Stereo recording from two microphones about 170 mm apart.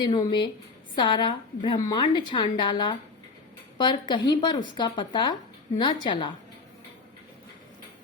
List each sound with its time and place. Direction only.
0.0 s a woman's voice: 25° left (ahead or behind)